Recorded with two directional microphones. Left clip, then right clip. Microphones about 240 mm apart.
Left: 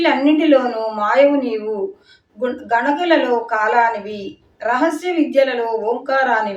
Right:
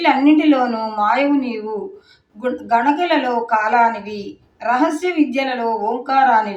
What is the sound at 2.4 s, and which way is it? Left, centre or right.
Speech, centre.